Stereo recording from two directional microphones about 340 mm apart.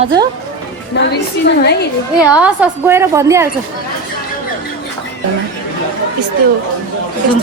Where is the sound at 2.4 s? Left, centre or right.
Centre.